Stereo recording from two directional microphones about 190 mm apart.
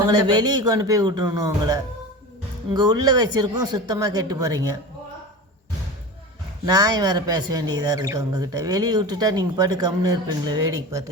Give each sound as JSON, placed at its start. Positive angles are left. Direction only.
{"t": 0.1, "sound": "speech", "side_deg": -20}
{"t": 6.7, "sound": "speech", "side_deg": -20}